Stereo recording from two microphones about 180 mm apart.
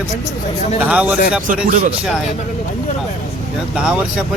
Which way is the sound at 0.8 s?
5° right (ahead or behind).